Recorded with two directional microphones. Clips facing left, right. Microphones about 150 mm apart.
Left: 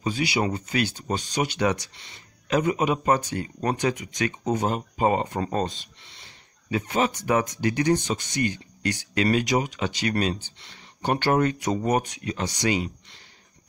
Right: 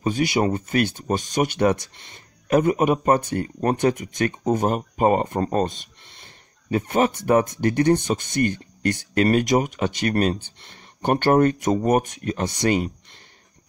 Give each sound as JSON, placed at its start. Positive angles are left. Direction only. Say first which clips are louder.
{"t": 0.0, "sound": "speech", "louder": "right 4 dB", "side_deg": -50}